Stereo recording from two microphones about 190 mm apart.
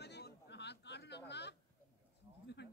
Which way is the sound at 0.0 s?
60° left (ahead or behind).